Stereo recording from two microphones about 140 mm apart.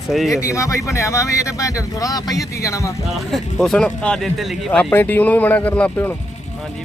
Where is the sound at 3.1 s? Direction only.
Centre (ahead or behind).